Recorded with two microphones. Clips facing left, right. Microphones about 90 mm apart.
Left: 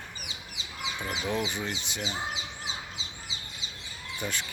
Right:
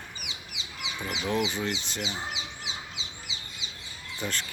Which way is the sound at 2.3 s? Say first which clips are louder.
Left 1 dB; 40° left (ahead or behind).